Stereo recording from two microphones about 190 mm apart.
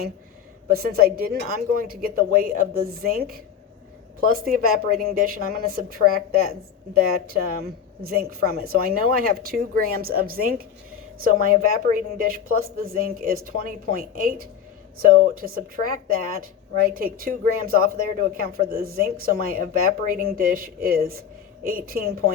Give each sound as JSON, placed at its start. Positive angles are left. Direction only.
{"t": 0.7, "sound": "a woman's voice", "side_deg": -50}
{"t": 7.6, "sound": "a woman's voice", "side_deg": -50}